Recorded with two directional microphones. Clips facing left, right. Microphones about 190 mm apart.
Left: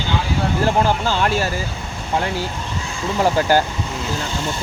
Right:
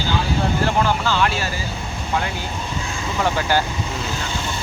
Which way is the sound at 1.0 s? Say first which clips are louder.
Left 2 dB; 45° left (ahead or behind).